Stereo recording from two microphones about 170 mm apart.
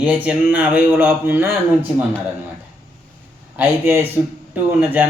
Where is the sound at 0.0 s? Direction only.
10° right (ahead or behind).